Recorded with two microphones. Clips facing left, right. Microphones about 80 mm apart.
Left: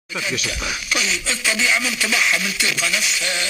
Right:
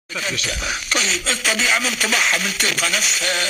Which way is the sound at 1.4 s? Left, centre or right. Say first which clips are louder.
Even; right.